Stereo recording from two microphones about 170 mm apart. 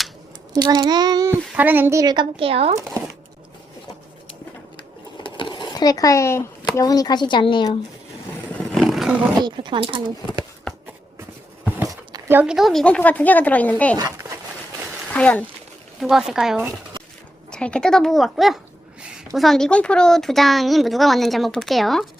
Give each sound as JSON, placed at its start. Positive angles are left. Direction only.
{"t": 0.5, "sound": "a child's voice", "side_deg": -25}
{"t": 5.2, "sound": "a sound", "side_deg": 30}
{"t": 6.7, "sound": "speech", "side_deg": 20}
{"t": 8.5, "sound": "roar", "side_deg": 5}
{"t": 9.4, "sound": "a child's voice", "side_deg": -25}
{"t": 11.6, "sound": "speech", "side_deg": -15}
{"t": 13.9, "sound": "a sound", "side_deg": -20}
{"t": 15.1, "sound": "speech", "side_deg": 10}
{"t": 16.0, "sound": "a woman's voice", "side_deg": 0}